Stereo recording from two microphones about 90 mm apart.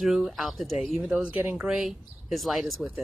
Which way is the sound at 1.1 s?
15° right (ahead or behind).